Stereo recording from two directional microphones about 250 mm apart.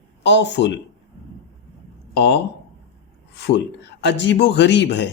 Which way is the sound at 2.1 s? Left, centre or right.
Left.